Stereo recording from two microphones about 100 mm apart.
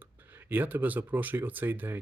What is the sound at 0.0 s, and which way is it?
Speech, 20° right (ahead or behind).